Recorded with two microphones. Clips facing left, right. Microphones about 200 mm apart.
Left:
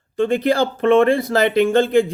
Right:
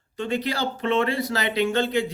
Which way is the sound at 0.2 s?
50° left (ahead or behind).